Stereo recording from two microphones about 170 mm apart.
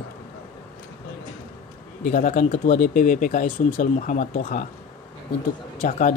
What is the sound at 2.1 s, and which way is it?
Speech, 50° left (ahead or behind).